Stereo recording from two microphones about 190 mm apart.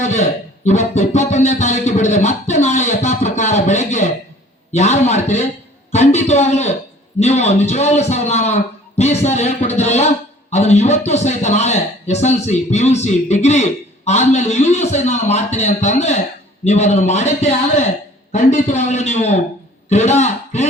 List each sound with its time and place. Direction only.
0.0 s a man's voice: 35° left (ahead or behind)